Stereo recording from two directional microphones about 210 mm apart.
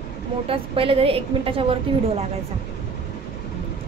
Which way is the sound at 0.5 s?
25° right (ahead or behind).